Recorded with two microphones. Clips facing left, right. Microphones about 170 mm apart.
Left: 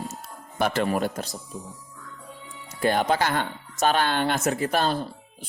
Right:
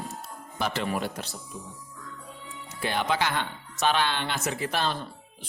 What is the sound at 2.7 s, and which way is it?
Speech, 45° left (ahead or behind).